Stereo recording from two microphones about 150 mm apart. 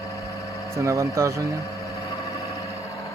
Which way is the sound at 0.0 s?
20° left (ahead or behind).